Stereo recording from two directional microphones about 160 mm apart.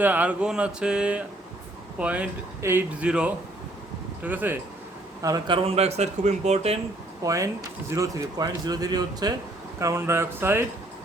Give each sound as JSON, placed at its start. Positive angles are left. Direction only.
{"t": 0.0, "sound": "speech", "side_deg": -10}
{"t": 5.2, "sound": "speech", "side_deg": -20}
{"t": 5.6, "sound": "speech", "side_deg": -40}
{"t": 7.2, "sound": "speech", "side_deg": -20}